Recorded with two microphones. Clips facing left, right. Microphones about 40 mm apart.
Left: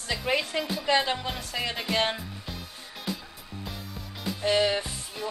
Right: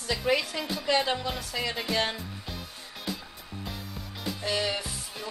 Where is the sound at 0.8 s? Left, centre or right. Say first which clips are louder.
Even; left.